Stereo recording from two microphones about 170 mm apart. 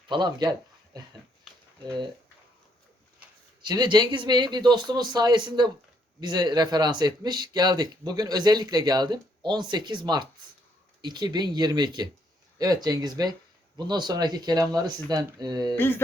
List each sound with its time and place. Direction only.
0.1 s speech: 25° right (ahead or behind)
3.6 s speech: 25° right (ahead or behind)
15.7 s mantra: 15° left (ahead or behind)